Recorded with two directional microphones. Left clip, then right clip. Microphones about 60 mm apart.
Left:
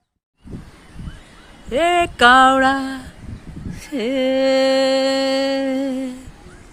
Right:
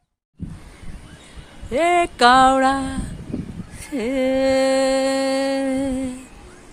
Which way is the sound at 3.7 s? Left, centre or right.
Centre.